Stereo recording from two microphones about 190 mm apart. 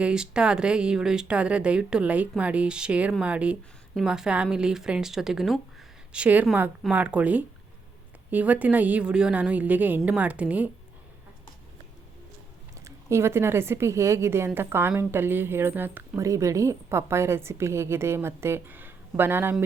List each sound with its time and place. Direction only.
0.0 s a woman's voice: 5° right (ahead or behind)
12.8 s a woman's voice: 15° right (ahead or behind)